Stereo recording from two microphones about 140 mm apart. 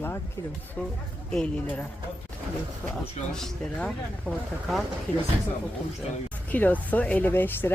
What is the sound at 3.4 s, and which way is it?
Speech, 5° left (ahead or behind).